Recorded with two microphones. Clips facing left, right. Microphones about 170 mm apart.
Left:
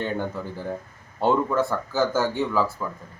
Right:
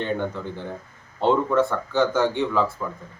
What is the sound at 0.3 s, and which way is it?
Speech, 5° left (ahead or behind).